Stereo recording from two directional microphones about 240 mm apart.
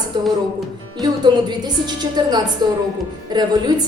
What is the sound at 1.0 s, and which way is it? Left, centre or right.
A woman's voice, centre.